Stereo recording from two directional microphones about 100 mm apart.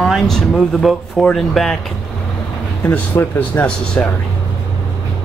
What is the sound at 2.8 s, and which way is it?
Speech, 20° left (ahead or behind).